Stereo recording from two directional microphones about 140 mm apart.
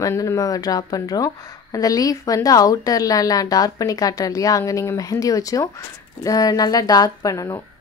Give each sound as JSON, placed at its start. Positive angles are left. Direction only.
{"t": 0.0, "sound": "speech", "side_deg": 20}